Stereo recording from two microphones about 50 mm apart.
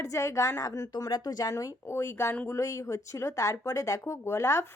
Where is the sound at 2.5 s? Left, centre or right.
Left.